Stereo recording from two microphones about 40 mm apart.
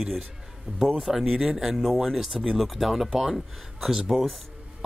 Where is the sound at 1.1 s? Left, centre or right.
Centre.